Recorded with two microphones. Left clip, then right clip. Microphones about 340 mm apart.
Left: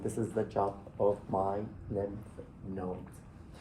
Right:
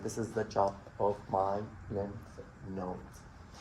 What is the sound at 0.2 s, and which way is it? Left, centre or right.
Speech, centre.